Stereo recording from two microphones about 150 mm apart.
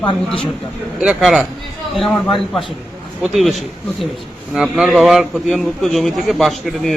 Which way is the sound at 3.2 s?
Centre (ahead or behind).